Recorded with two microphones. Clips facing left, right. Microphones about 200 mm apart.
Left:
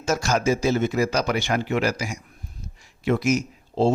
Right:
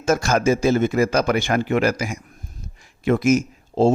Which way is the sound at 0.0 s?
55° right (ahead or behind).